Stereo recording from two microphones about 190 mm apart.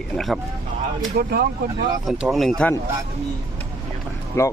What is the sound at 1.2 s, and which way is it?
Speech, 55° right (ahead or behind).